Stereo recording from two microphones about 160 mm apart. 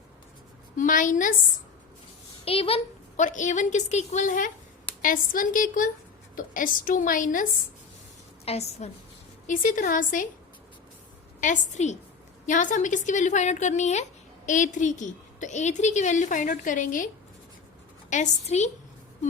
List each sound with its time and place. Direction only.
0.8 s a woman's voice: 55° left (ahead or behind)
2.4 s a sound: 35° left (ahead or behind)
3.2 s a woman's voice: 50° left (ahead or behind)
8.4 s a woman's voice: 40° left (ahead or behind)
9.5 s a woman's voice: 55° left (ahead or behind)
11.3 s a woman's voice: 50° left (ahead or behind)
18.1 s a woman's voice: 45° left (ahead or behind)